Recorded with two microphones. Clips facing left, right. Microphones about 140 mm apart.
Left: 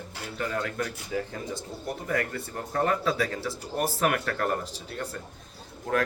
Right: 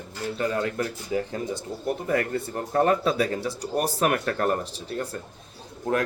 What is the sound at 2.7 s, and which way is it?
Speech, 25° right (ahead or behind).